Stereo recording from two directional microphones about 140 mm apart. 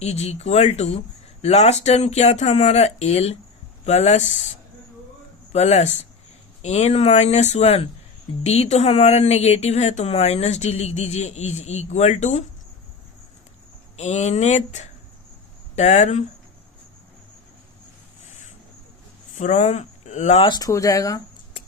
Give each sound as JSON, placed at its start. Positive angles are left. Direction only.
{"t": 0.0, "sound": "speech", "side_deg": 50}
{"t": 13.9, "sound": "speech", "side_deg": 55}
{"t": 19.4, "sound": "speech", "side_deg": 60}
{"t": 20.5, "sound": "speech", "side_deg": 25}